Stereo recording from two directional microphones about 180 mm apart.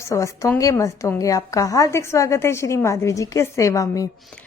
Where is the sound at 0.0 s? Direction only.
15° left (ahead or behind).